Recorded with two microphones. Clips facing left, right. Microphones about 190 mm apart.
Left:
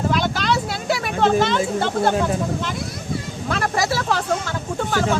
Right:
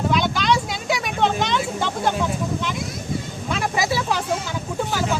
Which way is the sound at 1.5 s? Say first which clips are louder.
Left 4 dB; 55° left (ahead or behind).